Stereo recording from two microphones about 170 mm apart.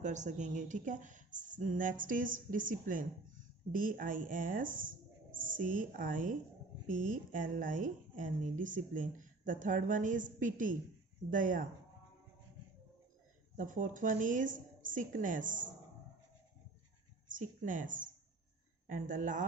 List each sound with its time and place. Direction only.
0.0 s a woman's voice: 45° right (ahead or behind)
13.6 s a woman's voice: 50° right (ahead or behind)
17.4 s a woman's voice: 50° right (ahead or behind)